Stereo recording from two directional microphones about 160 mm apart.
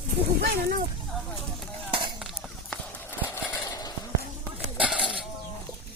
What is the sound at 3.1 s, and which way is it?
Horse, 15° left (ahead or behind).